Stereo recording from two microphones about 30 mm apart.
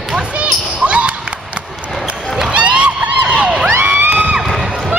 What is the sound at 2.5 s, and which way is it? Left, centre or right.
Crowd, right.